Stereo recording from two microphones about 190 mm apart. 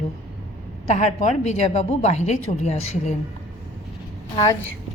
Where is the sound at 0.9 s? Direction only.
35° left (ahead or behind).